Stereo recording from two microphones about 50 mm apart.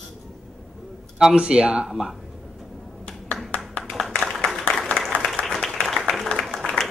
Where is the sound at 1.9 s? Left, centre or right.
Centre.